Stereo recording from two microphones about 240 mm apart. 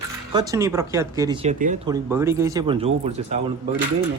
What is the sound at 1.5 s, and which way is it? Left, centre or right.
Speech, right.